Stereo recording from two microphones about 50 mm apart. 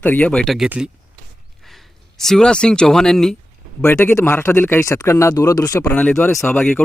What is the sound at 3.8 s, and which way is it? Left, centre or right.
Speech, left.